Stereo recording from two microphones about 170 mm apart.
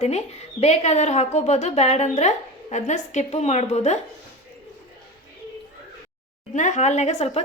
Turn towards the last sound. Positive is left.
turn(degrees=40)  # may be behind; listen again after turning